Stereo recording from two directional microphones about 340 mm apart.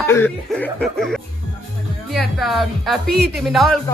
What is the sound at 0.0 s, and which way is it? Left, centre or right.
Speech, centre.